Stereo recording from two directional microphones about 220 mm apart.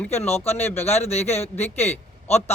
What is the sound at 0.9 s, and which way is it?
Speech, 30° left (ahead or behind).